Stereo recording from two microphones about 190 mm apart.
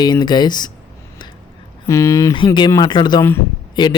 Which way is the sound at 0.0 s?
20° left (ahead or behind).